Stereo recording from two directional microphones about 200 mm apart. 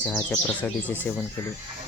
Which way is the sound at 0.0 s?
5° left (ahead or behind).